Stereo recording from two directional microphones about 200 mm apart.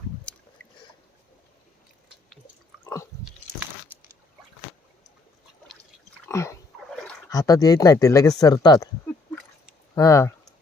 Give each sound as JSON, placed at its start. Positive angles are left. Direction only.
{"t": 2.8, "sound": "drip", "side_deg": 15}
{"t": 6.2, "sound": "a sound", "side_deg": 15}
{"t": 7.3, "sound": "speech", "side_deg": 15}
{"t": 9.9, "sound": "speech", "side_deg": 15}